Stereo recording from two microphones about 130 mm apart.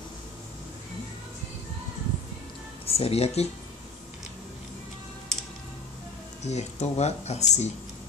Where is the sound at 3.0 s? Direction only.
50° left (ahead or behind).